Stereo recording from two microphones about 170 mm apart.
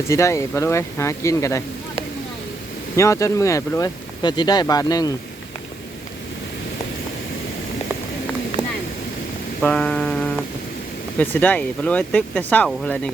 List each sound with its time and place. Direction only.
0.1 s speech: 15° left (ahead or behind)
2.9 s speech: 20° left (ahead or behind)
9.6 s a sound: 5° left (ahead or behind)
11.2 s speech: 10° left (ahead or behind)